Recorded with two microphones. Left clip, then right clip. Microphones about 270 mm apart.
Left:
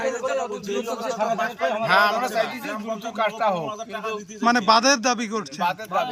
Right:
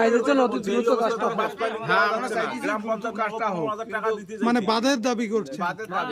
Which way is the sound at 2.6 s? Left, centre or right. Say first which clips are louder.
Right 3 dB; centre.